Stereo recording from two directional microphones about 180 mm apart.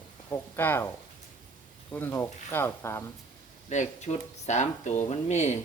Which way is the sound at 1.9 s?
10° left (ahead or behind).